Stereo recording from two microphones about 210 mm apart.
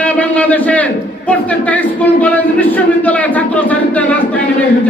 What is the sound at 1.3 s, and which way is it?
A man's voice, 5° left (ahead or behind).